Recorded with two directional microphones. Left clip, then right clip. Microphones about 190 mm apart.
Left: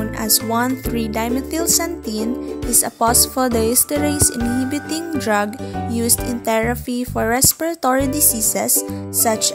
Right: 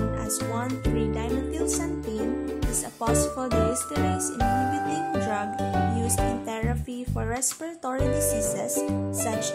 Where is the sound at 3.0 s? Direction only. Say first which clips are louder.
Left 8 dB; 40° left (ahead or behind).